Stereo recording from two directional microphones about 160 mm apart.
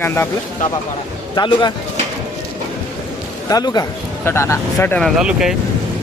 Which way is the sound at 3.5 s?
25° left (ahead or behind).